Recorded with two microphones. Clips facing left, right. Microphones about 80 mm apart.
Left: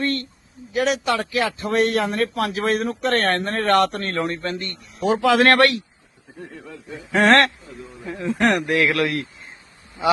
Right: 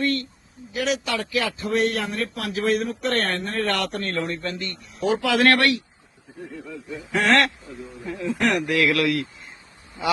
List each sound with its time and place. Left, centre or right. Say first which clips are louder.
0.0 s speech: even; left
7.1 s speech: left 4 dB; left
8.4 s speech: left 2 dB; left